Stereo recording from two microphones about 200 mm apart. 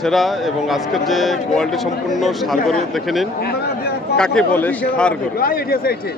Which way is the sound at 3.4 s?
50° left (ahead or behind).